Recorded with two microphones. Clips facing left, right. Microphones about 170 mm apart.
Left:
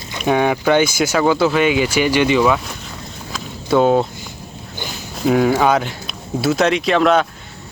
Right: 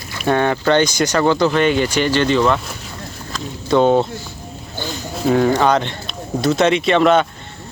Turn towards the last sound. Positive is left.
turn(degrees=0)  # may be behind; listen again after turning